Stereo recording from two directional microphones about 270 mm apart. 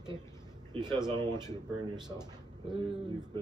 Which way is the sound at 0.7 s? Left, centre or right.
Centre.